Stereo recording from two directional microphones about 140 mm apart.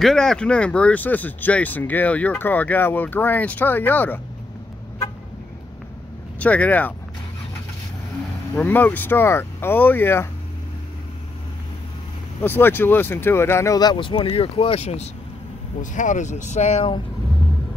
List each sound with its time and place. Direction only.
0.0 s speech: 5° left (ahead or behind)
6.4 s speech: 10° left (ahead or behind)
8.5 s speech: 10° left (ahead or behind)
12.4 s speech: 15° left (ahead or behind); by 15.0 s 50° left (ahead or behind)
15.8 s speech: 65° left (ahead or behind)